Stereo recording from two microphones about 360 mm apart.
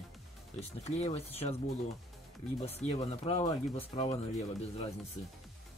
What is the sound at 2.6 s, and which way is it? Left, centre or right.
Speech, centre.